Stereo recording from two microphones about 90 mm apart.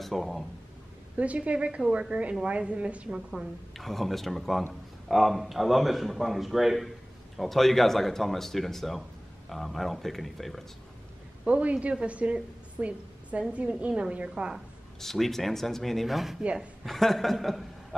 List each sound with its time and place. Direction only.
0.0 s speech: centre (ahead or behind)
1.1 s a woman's voice: 15° right (ahead or behind)
3.3 s a man's voice: centre (ahead or behind)
11.4 s a woman's voice: 15° right (ahead or behind)
15.0 s a man's voice: 5° left (ahead or behind)